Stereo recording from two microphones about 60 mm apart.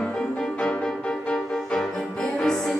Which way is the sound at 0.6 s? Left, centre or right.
Centre.